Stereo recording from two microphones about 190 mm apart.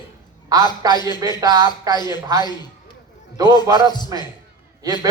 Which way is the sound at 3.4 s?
20° left (ahead or behind).